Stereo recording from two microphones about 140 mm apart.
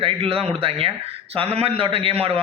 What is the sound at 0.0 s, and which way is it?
Speech, 40° right (ahead or behind).